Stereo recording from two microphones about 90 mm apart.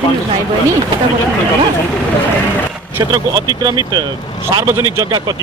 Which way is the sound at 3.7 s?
50° right (ahead or behind).